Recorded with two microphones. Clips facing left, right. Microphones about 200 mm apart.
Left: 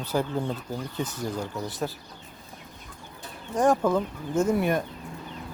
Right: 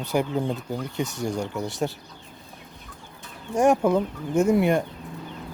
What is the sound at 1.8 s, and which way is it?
Speech, 25° right (ahead or behind).